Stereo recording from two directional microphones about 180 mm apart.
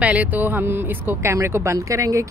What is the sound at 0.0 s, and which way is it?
Speech, 10° right (ahead or behind).